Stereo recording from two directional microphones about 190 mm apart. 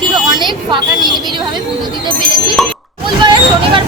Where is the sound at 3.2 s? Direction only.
25° right (ahead or behind).